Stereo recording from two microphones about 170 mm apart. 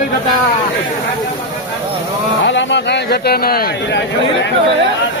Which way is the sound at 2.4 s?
90° left.